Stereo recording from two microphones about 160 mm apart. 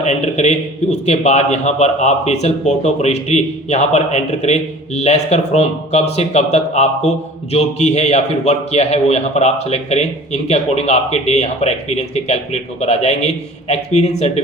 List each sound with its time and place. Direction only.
0.0 s a man's voice: 45° left (ahead or behind)